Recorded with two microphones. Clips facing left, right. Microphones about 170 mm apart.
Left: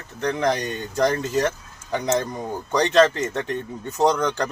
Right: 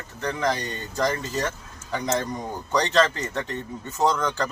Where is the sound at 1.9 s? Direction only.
20° left (ahead or behind).